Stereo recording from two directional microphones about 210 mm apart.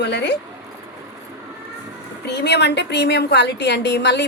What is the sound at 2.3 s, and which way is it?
A woman's voice, 55° left (ahead or behind).